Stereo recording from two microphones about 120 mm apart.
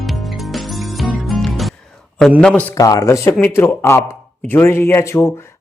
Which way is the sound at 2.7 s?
30° left (ahead or behind).